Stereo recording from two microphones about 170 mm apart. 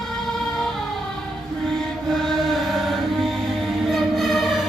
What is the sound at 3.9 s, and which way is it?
Music, centre (ahead or behind).